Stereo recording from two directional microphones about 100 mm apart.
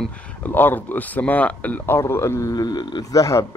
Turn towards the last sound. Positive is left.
turn(degrees=35)  # may be behind; listen again after turning